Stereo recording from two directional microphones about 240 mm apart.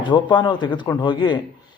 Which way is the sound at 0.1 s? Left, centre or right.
Centre.